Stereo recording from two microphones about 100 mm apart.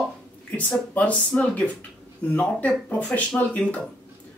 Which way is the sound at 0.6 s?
15° left (ahead or behind).